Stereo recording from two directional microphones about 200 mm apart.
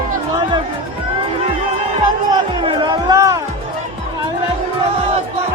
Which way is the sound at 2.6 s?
25° right (ahead or behind).